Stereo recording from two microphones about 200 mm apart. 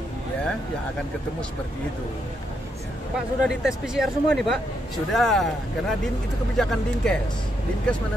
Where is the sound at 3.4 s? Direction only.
5° right (ahead or behind).